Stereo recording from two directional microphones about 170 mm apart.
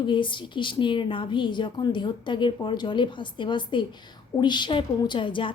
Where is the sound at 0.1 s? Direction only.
30° left (ahead or behind).